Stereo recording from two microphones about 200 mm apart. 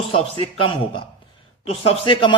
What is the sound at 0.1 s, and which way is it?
A man's voice, 25° left (ahead or behind).